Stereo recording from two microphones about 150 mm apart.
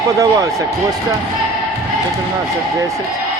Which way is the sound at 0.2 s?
20° right (ahead or behind).